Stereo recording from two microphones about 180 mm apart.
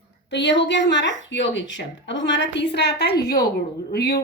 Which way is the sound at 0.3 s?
80° left.